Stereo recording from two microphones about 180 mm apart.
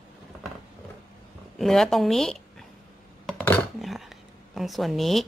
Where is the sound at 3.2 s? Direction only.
5° left (ahead or behind).